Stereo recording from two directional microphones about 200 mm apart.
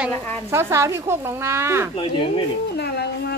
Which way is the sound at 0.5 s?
15° right (ahead or behind).